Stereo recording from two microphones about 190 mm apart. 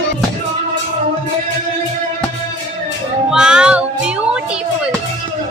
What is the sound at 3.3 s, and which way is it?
Music, 5° right (ahead or behind).